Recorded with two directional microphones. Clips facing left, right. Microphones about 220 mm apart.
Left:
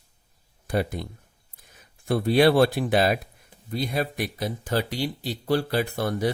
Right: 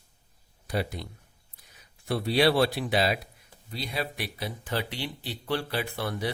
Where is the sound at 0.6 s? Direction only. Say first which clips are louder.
Left 5 dB; 50° left (ahead or behind).